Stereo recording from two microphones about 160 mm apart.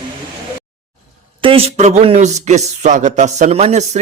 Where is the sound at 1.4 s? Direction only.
35° right (ahead or behind).